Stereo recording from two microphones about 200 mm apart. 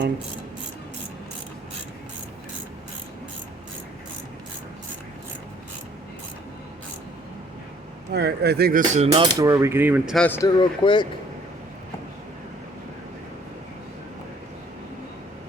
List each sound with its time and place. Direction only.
8.1 s speech: 55° right (ahead or behind); by 10.2 s 10° right (ahead or behind)
10.2 s speech: 10° left (ahead or behind)
10.6 s speech: 25° left (ahead or behind)